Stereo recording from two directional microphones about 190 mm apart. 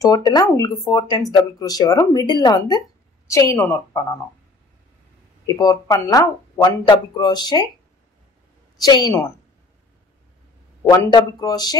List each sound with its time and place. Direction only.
0.0 s a woman's voice: 20° left (ahead or behind)
5.5 s speech: 20° left (ahead or behind)
8.7 s speech: 20° left (ahead or behind)
10.8 s speech: 20° left (ahead or behind)